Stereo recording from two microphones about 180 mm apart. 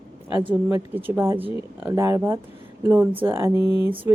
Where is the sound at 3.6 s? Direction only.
25° left (ahead or behind).